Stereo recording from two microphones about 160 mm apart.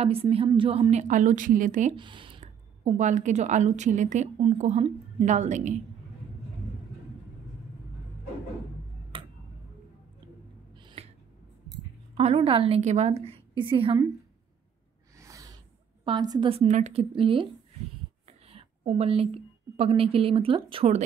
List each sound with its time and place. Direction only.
0.0 s a woman's voice: 35° right (ahead or behind)
2.0 s speech: 30° right (ahead or behind)
2.4 s a woman's voice: 45° right (ahead or behind)
9.1 s tick-tock: 30° right (ahead or behind)
10.8 s gasp: 30° right (ahead or behind)
12.2 s a woman's voice: 40° right (ahead or behind)
15.1 s a woman's voice: 20° right (ahead or behind)
18.5 s a woman's voice: 40° right (ahead or behind)